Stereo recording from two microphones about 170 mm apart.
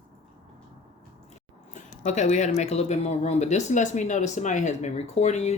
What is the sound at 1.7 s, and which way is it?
Speech, 40° left (ahead or behind).